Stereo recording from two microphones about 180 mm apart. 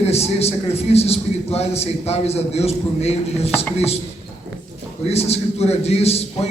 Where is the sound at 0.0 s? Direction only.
35° left (ahead or behind).